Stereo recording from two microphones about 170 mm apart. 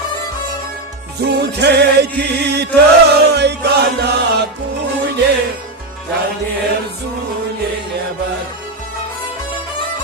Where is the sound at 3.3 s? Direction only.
75° right (ahead or behind).